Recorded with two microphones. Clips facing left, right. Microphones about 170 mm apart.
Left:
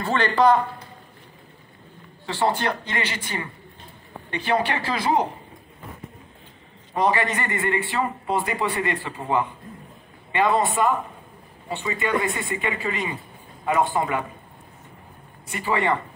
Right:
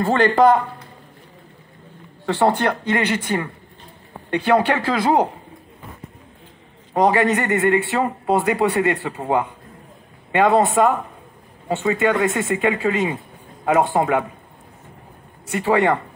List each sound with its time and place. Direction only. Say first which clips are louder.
0.0 s speech: right 5 dB; 50° right (ahead or behind)
2.2 s speech: right 5 dB; 60° right (ahead or behind)
6.9 s a man's voice: right 6 dB; 65° right (ahead or behind)
15.4 s a man's voice: right 6 dB; 75° right (ahead or behind)